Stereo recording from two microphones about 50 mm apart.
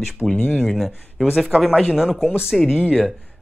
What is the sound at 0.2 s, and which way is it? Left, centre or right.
Speech, centre.